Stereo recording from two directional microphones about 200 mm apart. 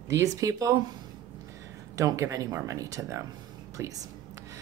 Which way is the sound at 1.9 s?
15° right (ahead or behind).